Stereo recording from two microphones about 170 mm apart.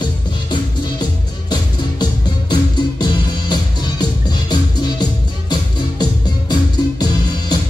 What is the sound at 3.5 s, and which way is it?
Music, 25° left (ahead or behind).